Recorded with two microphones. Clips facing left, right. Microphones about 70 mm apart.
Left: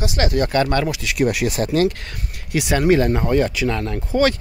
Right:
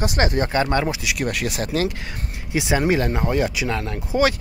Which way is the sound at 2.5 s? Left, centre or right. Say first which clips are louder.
Left 1 dB; centre.